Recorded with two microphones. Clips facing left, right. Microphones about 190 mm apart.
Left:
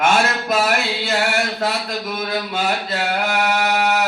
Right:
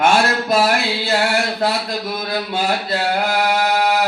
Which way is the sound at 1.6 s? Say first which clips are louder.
Right 2 dB; 35° right (ahead or behind).